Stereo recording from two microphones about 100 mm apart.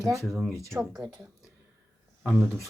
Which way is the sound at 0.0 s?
30° right (ahead or behind).